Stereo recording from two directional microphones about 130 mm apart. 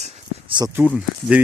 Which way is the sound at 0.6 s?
30° right (ahead or behind).